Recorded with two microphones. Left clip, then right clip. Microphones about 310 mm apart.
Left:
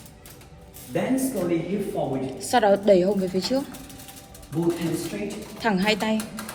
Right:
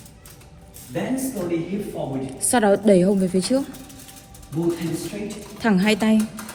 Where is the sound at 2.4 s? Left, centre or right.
Centre.